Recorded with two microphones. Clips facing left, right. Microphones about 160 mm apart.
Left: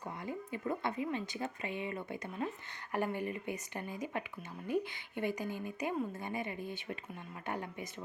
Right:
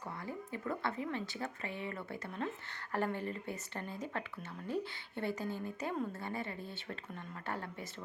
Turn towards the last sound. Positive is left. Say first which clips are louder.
# left 2 dB
turn(degrees=15)  # may be behind; listen again after turning